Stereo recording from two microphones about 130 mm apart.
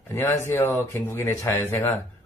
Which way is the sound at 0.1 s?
20° left (ahead or behind).